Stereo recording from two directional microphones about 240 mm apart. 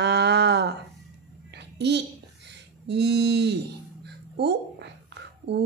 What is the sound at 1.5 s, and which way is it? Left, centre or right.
Babbling, right.